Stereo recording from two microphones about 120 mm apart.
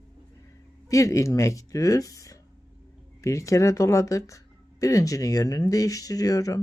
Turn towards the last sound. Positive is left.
turn(degrees=30)  # may be behind; listen again after turning